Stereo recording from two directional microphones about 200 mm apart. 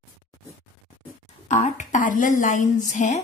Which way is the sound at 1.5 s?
35° left (ahead or behind).